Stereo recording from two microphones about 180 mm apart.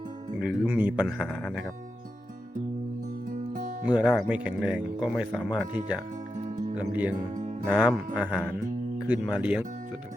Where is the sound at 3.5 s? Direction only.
45° right (ahead or behind).